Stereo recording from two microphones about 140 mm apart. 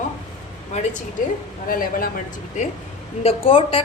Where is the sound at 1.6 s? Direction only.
90° left.